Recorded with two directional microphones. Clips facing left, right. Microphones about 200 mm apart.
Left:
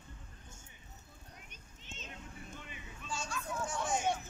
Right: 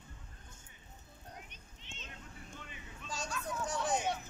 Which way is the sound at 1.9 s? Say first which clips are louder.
Left 3 dB; 45° left (ahead or behind).